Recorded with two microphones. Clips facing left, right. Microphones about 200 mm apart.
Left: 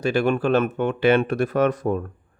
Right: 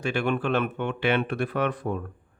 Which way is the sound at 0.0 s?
40° left (ahead or behind).